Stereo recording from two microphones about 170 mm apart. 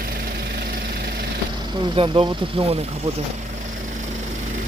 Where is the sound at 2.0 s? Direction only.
30° right (ahead or behind).